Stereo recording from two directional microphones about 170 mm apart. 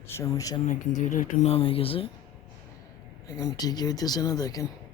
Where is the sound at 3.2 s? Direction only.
20° left (ahead or behind).